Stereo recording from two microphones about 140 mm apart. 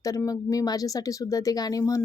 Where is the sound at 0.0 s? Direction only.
25° left (ahead or behind).